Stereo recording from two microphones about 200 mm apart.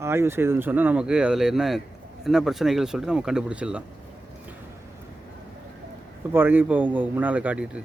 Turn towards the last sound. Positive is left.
turn(degrees=-5)  # may be behind; listen again after turning